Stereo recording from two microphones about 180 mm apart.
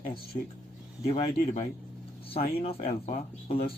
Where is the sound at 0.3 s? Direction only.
40° left (ahead or behind).